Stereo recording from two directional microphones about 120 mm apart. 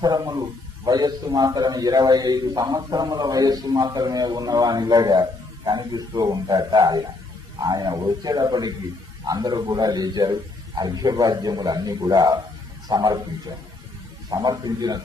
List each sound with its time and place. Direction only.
0.0 s a man's voice: 35° right (ahead or behind)